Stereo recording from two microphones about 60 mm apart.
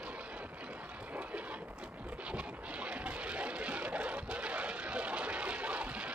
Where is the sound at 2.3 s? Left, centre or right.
Right.